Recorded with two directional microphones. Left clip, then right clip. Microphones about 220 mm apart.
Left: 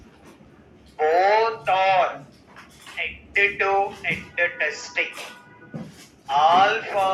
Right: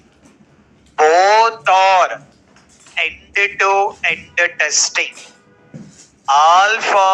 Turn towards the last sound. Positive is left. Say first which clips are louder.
# right 7 dB
turn(degrees=-40)  # may be behind; listen again after turning